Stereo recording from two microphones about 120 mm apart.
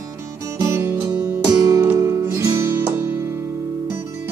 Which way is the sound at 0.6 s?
20° right (ahead or behind).